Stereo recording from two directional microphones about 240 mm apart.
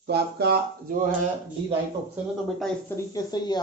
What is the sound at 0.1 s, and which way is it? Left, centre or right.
Speech, right.